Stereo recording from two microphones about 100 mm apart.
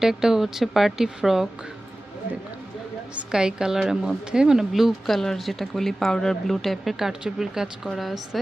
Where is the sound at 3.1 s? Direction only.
10° right (ahead or behind).